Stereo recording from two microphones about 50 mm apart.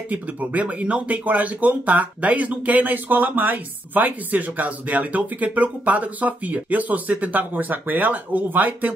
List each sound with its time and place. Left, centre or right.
0.1 s speech: right